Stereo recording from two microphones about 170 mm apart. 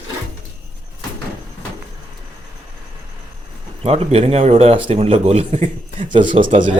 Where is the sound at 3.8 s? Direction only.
35° right (ahead or behind).